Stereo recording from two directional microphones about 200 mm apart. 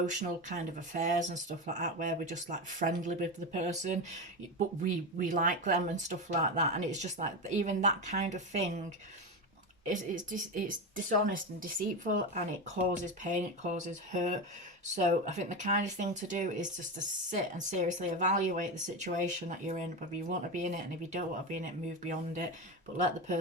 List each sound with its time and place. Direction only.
0.0 s speech: 40° right (ahead or behind)
9.8 s speech: 40° right (ahead or behind)